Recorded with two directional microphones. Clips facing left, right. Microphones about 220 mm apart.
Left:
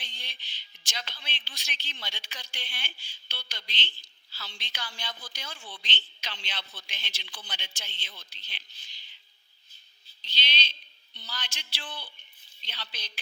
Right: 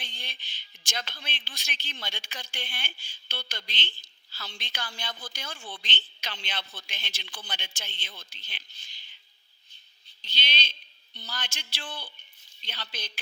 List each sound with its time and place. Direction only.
0.0 s a woman's voice: 50° right (ahead or behind)
10.2 s a woman's voice: 50° right (ahead or behind)